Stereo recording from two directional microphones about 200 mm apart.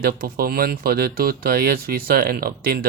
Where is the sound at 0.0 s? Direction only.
50° right (ahead or behind).